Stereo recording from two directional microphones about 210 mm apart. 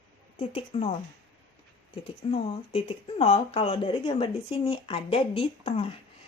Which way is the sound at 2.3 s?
30° left (ahead or behind).